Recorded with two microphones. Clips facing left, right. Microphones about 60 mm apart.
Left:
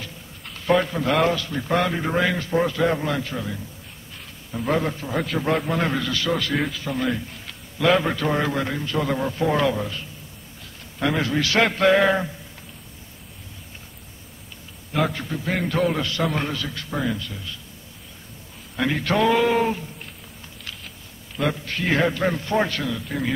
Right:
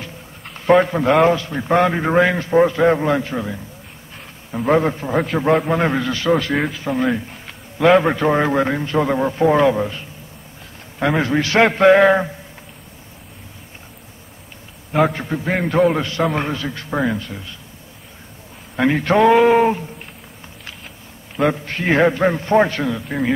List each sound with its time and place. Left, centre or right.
0.7 s a man's voice: right
5.3 s a man's voice: centre
15.0 s a man's voice: right
18.8 s a man's voice: right
21.4 s a man's voice: right